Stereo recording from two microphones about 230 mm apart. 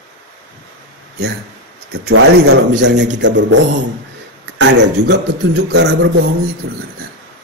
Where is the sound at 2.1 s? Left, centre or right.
Right.